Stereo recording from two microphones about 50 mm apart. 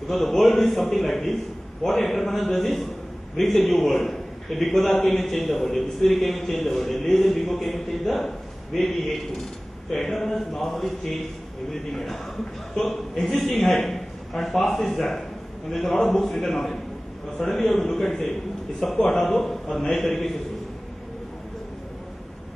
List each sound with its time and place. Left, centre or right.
0.1 s a man's voice: centre
17.4 s a man's voice: centre
18.0 s a man's voice: left
18.8 s a man's voice: centre